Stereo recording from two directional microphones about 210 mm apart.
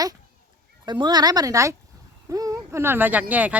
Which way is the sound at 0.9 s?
20° right (ahead or behind).